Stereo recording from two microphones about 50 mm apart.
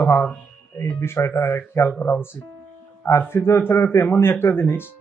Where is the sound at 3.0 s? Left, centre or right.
Left.